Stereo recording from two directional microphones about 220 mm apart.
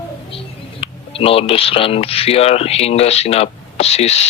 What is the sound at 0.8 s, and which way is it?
A man's voice, 25° left (ahead or behind).